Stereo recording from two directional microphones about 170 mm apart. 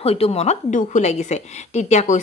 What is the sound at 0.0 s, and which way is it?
A woman's voice, 35° left (ahead or behind).